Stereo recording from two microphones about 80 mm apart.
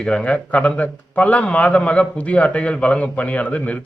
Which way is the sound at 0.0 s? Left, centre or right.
Centre.